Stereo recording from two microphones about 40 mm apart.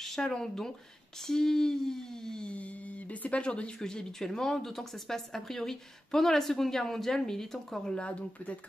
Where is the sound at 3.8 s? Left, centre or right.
Centre.